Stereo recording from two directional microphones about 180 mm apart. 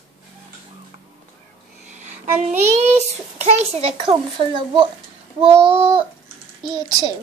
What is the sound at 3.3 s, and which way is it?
A child's voice, 35° right (ahead or behind).